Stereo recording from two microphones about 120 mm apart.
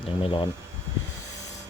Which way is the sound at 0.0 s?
50° left (ahead or behind).